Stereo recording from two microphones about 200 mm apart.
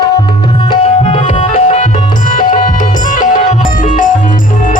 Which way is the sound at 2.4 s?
40° left (ahead or behind).